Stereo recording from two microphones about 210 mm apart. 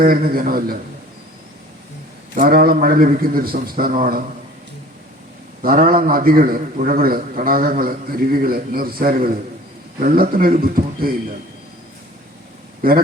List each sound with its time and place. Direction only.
0.0 s a man's voice: 45° right (ahead or behind)
2.3 s a man's voice: 45° right (ahead or behind)
5.6 s a man's voice: 45° right (ahead or behind)